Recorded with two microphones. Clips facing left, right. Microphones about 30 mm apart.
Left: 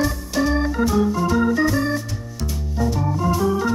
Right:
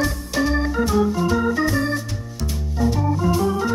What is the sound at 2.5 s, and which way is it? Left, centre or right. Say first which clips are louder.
Music: right 1 dB; centre.